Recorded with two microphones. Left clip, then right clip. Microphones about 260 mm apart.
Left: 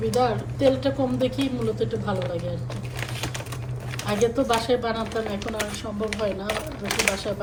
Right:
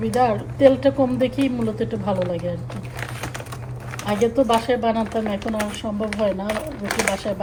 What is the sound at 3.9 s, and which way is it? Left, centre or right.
Speech, centre.